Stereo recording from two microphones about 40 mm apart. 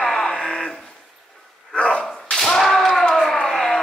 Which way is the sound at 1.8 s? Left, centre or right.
Left.